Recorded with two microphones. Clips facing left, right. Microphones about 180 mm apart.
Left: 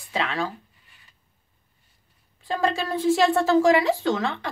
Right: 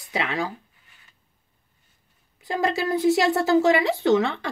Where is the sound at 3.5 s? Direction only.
25° right (ahead or behind).